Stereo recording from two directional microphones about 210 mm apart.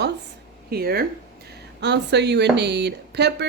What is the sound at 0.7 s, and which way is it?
Speech, 45° right (ahead or behind).